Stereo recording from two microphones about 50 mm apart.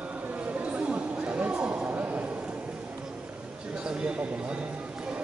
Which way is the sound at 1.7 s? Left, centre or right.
Right.